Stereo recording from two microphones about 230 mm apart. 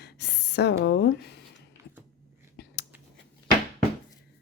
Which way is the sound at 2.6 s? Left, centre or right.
Left.